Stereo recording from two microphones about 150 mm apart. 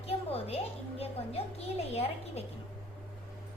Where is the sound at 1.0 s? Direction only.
40° left (ahead or behind).